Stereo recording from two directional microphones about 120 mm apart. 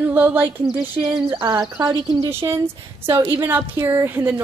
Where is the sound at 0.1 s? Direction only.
15° right (ahead or behind).